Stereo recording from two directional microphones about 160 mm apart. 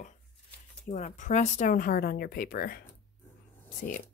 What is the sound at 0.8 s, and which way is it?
Speech, 50° left (ahead or behind).